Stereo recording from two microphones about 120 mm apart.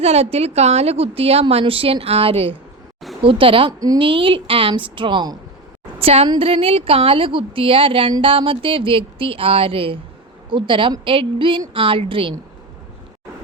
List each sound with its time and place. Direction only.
0.0 s a woman's voice: 60° right (ahead or behind)
3.7 s a woman's voice: 30° right (ahead or behind)
3.9 s speech: 45° right (ahead or behind)
6.0 s a woman's voice: 55° right (ahead or behind)